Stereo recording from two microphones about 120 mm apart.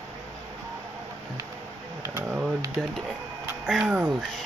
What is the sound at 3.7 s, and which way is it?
Speech, 10° right (ahead or behind).